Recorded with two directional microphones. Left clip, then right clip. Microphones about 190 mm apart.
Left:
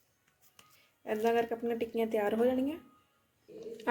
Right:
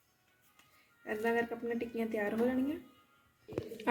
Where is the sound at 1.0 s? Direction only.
40° left (ahead or behind).